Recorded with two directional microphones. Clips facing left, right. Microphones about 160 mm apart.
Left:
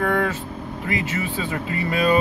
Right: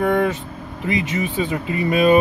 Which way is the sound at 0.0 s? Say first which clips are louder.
Right 4 dB; 20° right (ahead or behind).